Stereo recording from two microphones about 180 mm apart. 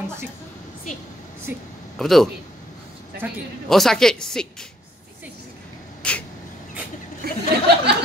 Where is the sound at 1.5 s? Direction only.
10° right (ahead or behind).